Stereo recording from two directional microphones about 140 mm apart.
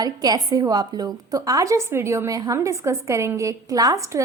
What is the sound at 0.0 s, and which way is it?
A woman's voice, 25° right (ahead or behind).